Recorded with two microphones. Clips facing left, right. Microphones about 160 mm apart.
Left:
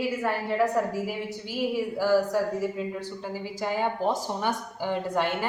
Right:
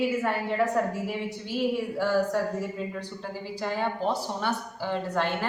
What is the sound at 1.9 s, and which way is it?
A woman's voice, 10° left (ahead or behind).